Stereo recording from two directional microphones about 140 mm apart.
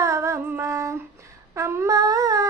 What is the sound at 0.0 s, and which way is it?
Female singing, 20° right (ahead or behind).